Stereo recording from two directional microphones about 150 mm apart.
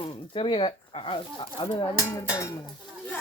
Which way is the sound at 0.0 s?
35° left (ahead or behind).